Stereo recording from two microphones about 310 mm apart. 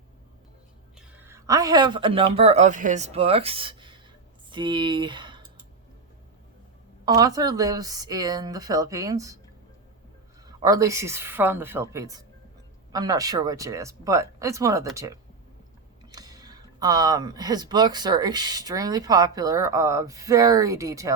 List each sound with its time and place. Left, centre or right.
0.9 s speech: centre
7.0 s speech: centre
10.4 s speech: centre
16.1 s speech: centre